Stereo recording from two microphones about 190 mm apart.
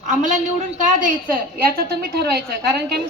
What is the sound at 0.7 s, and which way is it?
A woman's voice, 45° right (ahead or behind).